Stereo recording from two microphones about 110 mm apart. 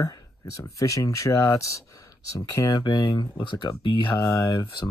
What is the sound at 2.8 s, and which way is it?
Speech, 45° left (ahead or behind).